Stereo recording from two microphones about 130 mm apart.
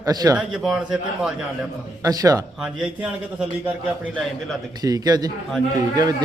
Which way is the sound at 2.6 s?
5° right (ahead or behind).